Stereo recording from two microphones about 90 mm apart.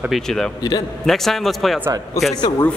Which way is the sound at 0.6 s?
50° left (ahead or behind).